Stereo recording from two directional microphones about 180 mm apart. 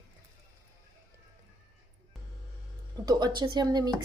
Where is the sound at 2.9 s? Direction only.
20° right (ahead or behind).